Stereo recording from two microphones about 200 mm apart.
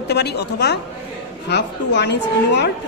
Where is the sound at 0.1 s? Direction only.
55° left (ahead or behind).